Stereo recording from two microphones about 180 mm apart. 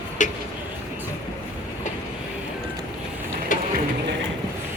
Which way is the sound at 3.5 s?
45° left (ahead or behind).